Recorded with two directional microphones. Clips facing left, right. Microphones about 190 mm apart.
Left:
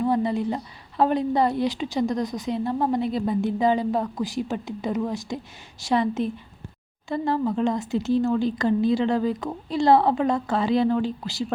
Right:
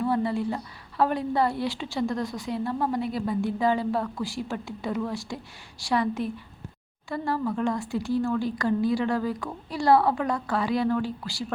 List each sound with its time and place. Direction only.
0.0 s a woman's voice: 20° left (ahead or behind)